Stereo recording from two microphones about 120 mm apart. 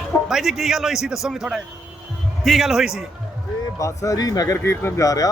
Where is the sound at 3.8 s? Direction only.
25° left (ahead or behind).